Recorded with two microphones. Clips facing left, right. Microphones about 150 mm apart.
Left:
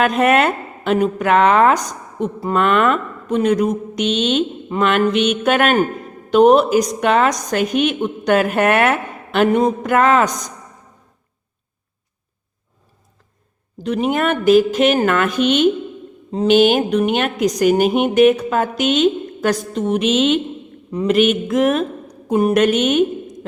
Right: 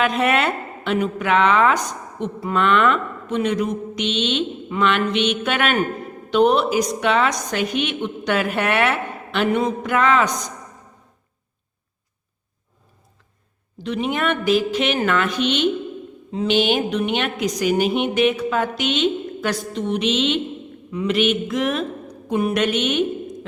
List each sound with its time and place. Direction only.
0.0 s a woman's voice: 45° left (ahead or behind)
13.8 s a woman's voice: 45° left (ahead or behind)